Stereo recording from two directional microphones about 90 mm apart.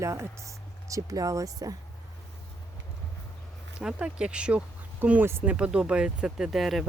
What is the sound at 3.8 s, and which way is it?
Speech, 10° right (ahead or behind).